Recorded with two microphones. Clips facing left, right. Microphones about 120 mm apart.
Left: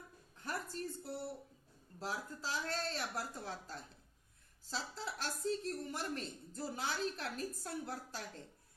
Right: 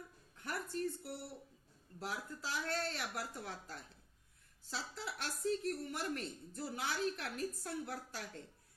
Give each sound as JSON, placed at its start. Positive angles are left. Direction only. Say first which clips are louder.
{"t": 0.4, "sound": "music", "louder": "right 2 dB", "side_deg": 35}
{"t": 2.0, "sound": "speech", "louder": "left 1 dB", "side_deg": 35}